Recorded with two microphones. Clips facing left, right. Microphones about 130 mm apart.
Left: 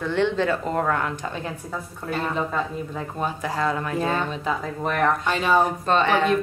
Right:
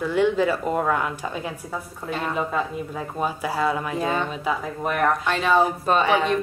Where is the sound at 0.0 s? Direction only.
10° right (ahead or behind).